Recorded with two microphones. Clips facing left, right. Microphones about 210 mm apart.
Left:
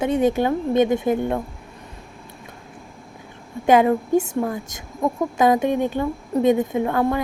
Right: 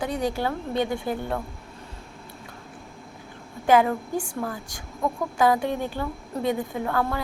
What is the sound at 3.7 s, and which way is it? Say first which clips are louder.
Speech: left 5 dB; 20° left (ahead or behind).